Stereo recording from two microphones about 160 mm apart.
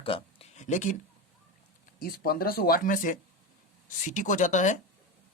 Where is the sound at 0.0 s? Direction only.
35° left (ahead or behind).